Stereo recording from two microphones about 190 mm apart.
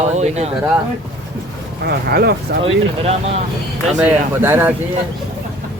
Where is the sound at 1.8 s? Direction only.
55° right (ahead or behind).